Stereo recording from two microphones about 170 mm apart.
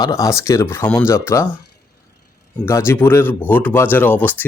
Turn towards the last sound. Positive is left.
turn(degrees=10)  # may be behind; listen again after turning